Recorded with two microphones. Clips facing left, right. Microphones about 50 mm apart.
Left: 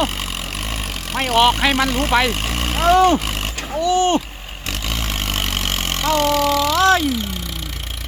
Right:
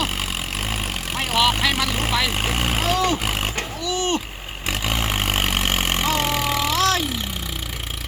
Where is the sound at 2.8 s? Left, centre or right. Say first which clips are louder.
Left 10 dB; left.